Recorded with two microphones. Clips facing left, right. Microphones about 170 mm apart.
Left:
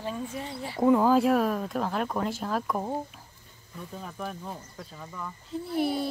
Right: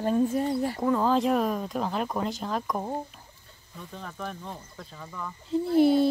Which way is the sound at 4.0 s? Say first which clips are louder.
Even; 10° left (ahead or behind).